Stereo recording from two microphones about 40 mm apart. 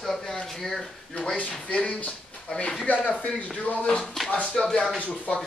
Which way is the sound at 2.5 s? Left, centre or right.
Centre.